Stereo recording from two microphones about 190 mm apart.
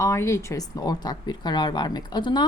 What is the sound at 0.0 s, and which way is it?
Speech, 15° left (ahead or behind).